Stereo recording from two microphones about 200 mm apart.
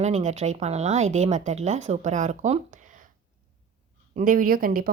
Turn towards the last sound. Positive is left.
turn(degrees=-45)  # may be behind; listen again after turning